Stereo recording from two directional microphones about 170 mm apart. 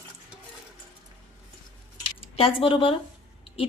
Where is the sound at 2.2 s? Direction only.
35° left (ahead or behind).